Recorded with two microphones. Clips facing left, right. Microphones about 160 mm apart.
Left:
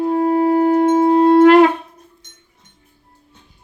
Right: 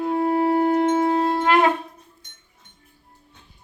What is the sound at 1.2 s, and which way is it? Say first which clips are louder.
Shofar: left 11 dB; 65° left (ahead or behind).